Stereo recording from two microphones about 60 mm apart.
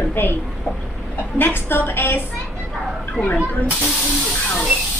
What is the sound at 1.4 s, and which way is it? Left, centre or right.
Speech, left.